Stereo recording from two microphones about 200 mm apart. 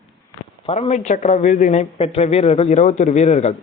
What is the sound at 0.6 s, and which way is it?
Speech, 30° left (ahead or behind).